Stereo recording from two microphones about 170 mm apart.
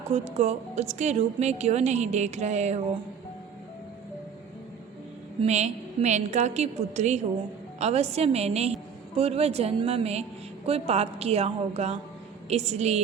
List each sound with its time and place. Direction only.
0.1 s a woman's voice: 40° right (ahead or behind)
5.4 s a woman's voice: 40° right (ahead or behind)